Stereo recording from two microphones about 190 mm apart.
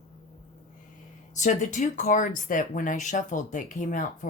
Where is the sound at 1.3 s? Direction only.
40° left (ahead or behind).